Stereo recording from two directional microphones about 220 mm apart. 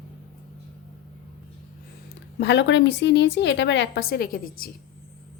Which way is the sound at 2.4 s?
50° left (ahead or behind).